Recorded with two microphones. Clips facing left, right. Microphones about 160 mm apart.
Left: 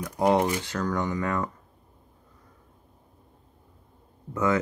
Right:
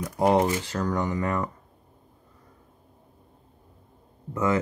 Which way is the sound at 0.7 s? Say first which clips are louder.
Right 1 dB; 30° right (ahead or behind).